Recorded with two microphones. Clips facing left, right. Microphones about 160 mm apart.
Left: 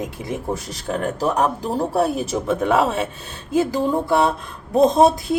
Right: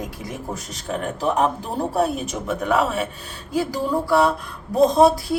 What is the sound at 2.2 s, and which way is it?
Speech, 30° left (ahead or behind).